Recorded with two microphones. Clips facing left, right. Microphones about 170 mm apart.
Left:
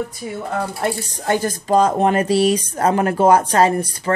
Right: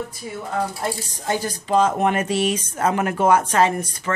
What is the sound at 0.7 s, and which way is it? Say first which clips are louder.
Speech: left 4 dB; 60° left (ahead or behind).